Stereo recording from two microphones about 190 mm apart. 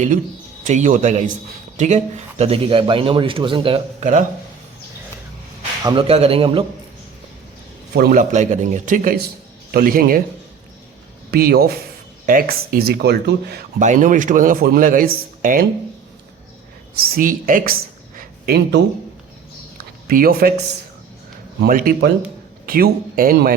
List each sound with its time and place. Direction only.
0.6 s a man's voice: 40° right (ahead or behind)
4.0 s a man's voice: 40° right (ahead or behind)
5.8 s speech: 30° right (ahead or behind)
7.9 s speech: 50° right (ahead or behind)
11.3 s speech: 55° right (ahead or behind)
13.7 s speech: 40° right (ahead or behind)
16.9 s speech: 50° right (ahead or behind)
18.2 s a sound: 55° right (ahead or behind)
20.1 s speech: 50° right (ahead or behind)
21.6 s speech: 50° right (ahead or behind)